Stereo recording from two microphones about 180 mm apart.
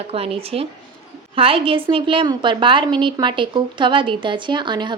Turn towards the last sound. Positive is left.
turn(degrees=-25)  # may be behind; listen again after turning